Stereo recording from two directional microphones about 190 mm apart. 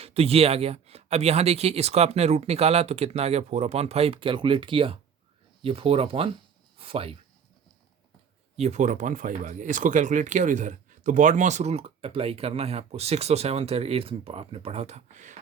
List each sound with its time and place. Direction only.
0.0 s speech: 30° right (ahead or behind)
8.5 s speech: 35° right (ahead or behind)